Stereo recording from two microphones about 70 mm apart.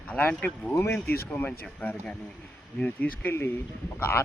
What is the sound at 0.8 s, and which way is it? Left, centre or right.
Speech, left.